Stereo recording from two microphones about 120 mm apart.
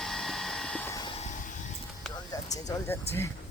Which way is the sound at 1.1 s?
70° left (ahead or behind).